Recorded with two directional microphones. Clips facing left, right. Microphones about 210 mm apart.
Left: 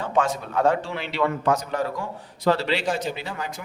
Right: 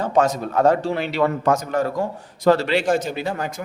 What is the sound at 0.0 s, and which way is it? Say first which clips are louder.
A man's voice: right 5 dB; 40° right (ahead or behind).